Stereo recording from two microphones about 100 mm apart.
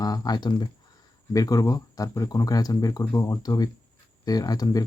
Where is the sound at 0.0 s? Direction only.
40° left (ahead or behind).